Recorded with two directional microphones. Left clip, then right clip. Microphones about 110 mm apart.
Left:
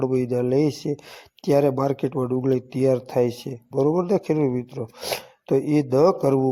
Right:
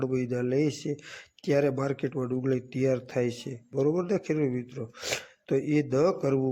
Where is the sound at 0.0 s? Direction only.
30° left (ahead or behind).